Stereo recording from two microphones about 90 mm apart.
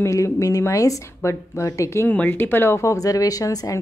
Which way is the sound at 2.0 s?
20° left (ahead or behind).